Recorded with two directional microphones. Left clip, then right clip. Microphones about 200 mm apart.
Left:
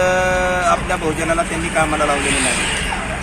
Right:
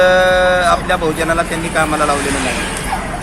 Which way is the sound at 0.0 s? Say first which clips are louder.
Right 6 dB; 10° right (ahead or behind).